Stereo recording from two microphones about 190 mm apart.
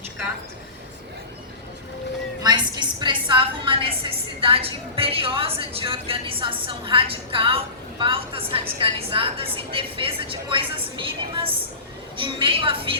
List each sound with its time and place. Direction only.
2.4 s a woman's voice: 20° right (ahead or behind)